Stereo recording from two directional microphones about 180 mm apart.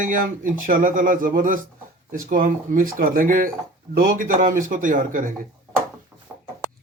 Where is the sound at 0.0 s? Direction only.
50° right (ahead or behind).